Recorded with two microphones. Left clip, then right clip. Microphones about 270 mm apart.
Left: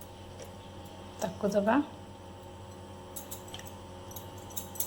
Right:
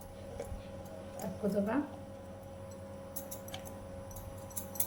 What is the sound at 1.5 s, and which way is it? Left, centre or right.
Speech, left.